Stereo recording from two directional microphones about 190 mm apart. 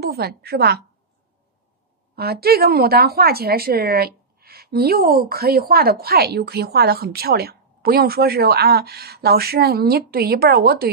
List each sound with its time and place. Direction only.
0.0 s a woman's voice: 55° right (ahead or behind)
2.1 s a woman's voice: 55° right (ahead or behind)